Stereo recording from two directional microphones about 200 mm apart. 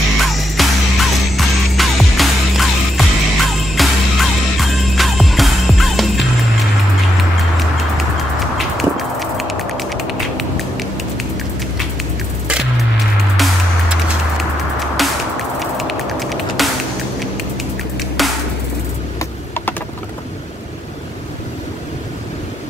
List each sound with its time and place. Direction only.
0.2 s music: centre (ahead or behind)
8.5 s a sound: centre (ahead or behind)
13.4 s music: centre (ahead or behind)
15.0 s music: centre (ahead or behind)
17.9 s music: centre (ahead or behind)
19.1 s computer keyboard: 10° left (ahead or behind)